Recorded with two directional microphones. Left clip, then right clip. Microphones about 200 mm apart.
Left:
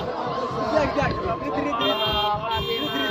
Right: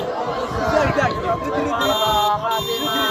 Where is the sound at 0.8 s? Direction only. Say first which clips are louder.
Right 4 dB; 40° left (ahead or behind).